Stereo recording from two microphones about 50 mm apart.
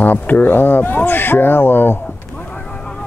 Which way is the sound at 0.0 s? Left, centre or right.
Left.